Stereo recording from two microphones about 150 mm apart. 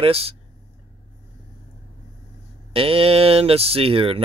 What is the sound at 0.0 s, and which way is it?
Speech, 40° right (ahead or behind).